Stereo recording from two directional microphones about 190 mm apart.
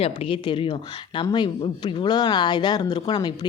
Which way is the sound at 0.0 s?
30° left (ahead or behind).